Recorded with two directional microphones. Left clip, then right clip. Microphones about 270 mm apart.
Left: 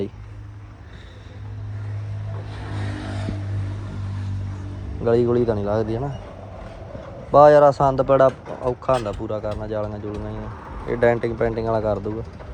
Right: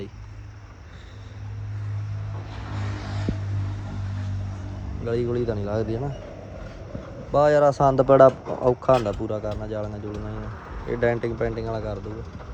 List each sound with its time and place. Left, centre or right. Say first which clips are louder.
2.5 s a sound: left 3 dB; left
5.0 s speech: left 7 dB; centre
7.3 s speech: left 6 dB; centre